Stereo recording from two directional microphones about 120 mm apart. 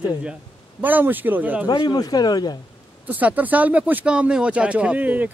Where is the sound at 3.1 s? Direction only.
15° right (ahead or behind).